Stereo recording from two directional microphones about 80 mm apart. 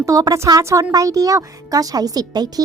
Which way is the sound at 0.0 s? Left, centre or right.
Right.